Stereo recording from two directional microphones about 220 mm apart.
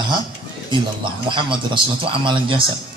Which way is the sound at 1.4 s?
20° right (ahead or behind).